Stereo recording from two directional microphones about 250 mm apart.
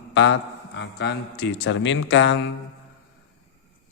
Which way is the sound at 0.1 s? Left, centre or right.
Left.